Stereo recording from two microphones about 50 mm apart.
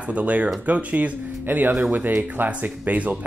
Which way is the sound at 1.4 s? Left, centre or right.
Right.